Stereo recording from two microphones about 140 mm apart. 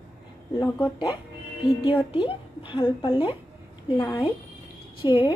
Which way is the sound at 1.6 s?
40° left (ahead or behind).